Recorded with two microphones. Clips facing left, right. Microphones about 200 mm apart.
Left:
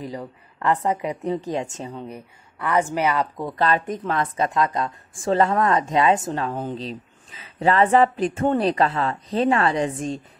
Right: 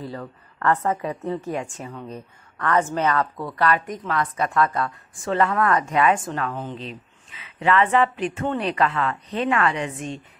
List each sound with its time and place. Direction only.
0.0 s a woman's voice: 15° left (ahead or behind)
2.0 s speech: 10° left (ahead or behind); by 10.2 s 35° left (ahead or behind)